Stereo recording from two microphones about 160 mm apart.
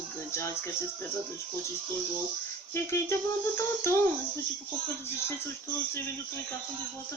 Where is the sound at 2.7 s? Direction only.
15° left (ahead or behind).